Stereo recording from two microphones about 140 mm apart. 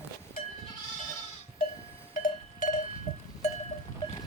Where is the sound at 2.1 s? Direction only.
75° left (ahead or behind).